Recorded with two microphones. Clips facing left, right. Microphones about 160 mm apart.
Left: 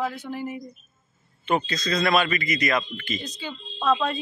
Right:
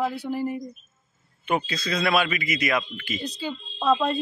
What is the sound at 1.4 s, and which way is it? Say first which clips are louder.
Speech: left 1 dB; 10° right (ahead or behind).